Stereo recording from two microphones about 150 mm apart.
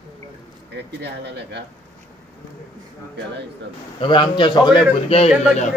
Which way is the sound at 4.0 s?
30° left (ahead or behind).